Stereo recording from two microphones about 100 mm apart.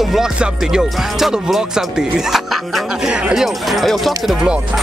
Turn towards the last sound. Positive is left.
turn(degrees=0)  # may be behind; listen again after turning